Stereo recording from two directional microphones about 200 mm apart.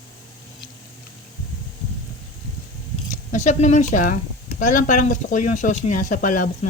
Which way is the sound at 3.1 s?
35° left (ahead or behind).